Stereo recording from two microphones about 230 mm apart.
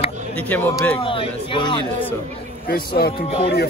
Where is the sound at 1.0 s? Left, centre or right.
Left.